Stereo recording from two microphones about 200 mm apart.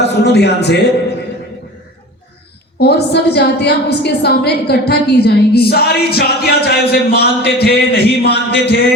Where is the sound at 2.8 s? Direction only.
55° left (ahead or behind).